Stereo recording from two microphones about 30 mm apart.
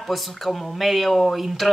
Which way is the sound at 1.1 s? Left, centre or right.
Centre.